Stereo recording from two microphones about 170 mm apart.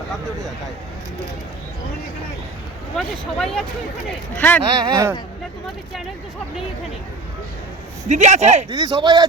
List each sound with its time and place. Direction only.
2.9 s speech: centre (ahead or behind)
4.6 s speech: 25° right (ahead or behind)
8.1 s speech: 45° right (ahead or behind)
8.7 s speech: 25° right (ahead or behind)